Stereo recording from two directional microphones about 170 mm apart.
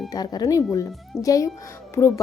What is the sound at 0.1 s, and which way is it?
Speech, 25° left (ahead or behind).